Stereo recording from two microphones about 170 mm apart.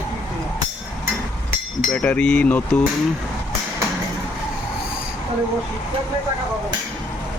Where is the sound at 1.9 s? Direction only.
5° left (ahead or behind).